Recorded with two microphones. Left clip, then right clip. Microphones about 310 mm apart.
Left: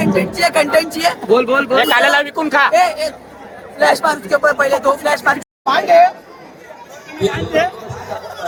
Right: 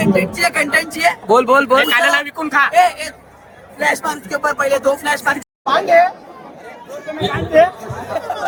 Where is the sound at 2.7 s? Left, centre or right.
Centre.